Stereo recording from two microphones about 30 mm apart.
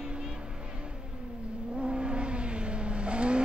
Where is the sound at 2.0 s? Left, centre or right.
Right.